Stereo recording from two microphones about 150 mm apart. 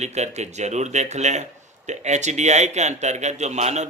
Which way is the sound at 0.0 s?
50° right (ahead or behind).